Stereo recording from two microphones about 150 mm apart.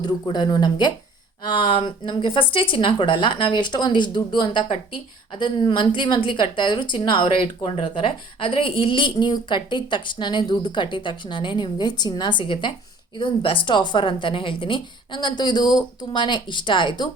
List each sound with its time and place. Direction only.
0.0 s speech: 30° left (ahead or behind)